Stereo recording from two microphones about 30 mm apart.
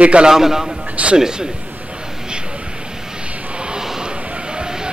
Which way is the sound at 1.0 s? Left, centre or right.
Right.